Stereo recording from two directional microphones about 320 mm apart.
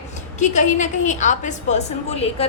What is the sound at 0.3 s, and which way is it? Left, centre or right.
A woman's voice, left.